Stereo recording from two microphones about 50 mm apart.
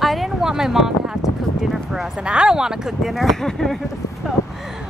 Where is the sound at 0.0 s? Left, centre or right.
Centre.